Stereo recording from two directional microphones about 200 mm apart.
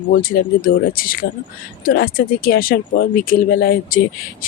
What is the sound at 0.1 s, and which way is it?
Speech, 50° left (ahead or behind).